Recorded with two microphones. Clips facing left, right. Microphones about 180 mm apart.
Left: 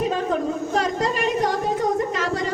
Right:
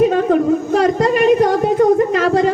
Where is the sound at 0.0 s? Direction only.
60° right (ahead or behind).